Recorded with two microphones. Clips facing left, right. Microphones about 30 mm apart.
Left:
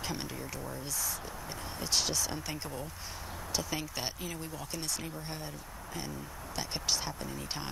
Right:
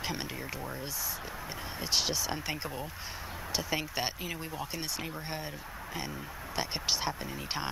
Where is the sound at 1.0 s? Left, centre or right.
Centre.